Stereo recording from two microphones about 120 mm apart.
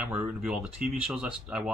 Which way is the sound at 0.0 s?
10° right (ahead or behind).